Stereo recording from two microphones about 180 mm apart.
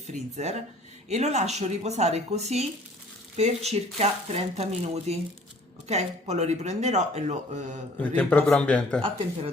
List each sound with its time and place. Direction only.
0.1 s speech: 40° right (ahead or behind)
8.1 s a man's voice: 10° left (ahead or behind)
9.0 s speech: 30° right (ahead or behind)